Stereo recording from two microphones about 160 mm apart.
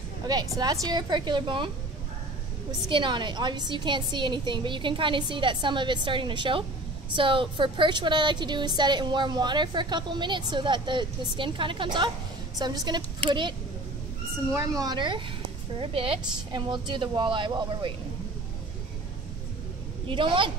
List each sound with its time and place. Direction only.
0.6 s a woman's voice: 25° right (ahead or behind)
2.9 s a woman's voice: 30° right (ahead or behind)
14.8 s a woman's voice: 25° right (ahead or behind)
20.1 s a woman's voice: 30° right (ahead or behind)